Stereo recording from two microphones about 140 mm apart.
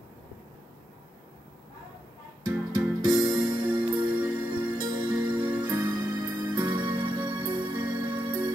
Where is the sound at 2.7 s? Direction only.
30° right (ahead or behind).